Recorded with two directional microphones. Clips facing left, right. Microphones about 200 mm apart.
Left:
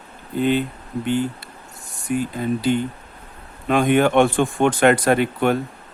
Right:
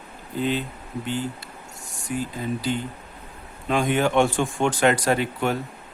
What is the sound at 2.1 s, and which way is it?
Speech, 60° left (ahead or behind).